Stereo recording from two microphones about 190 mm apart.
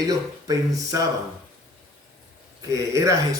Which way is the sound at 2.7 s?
15° right (ahead or behind).